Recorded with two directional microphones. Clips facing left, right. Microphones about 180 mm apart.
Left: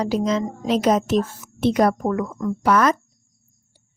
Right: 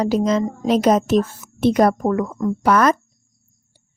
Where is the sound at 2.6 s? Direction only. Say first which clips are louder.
Right 2 dB; 50° right (ahead or behind).